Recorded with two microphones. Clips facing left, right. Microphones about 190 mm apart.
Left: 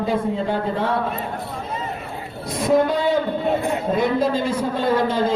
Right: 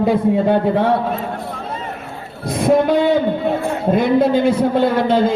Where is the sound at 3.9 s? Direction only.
65° right (ahead or behind).